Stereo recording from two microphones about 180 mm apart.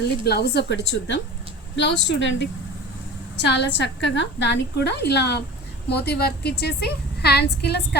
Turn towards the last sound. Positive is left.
turn(degrees=65)  # may be behind; listen again after turning